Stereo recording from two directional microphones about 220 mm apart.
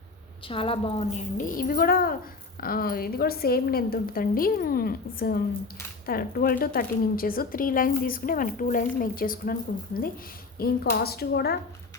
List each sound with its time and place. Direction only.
0.4 s a woman's voice: 25° left (ahead or behind); by 11.5 s 45° left (ahead or behind)